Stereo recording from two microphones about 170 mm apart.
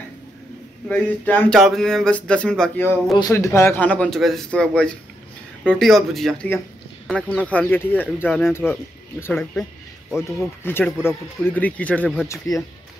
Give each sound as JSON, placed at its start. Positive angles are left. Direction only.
{"t": 0.8, "sound": "speech", "side_deg": 10}
{"t": 3.2, "sound": "a man's voice", "side_deg": 20}
{"t": 12.5, "sound": "speech", "side_deg": 20}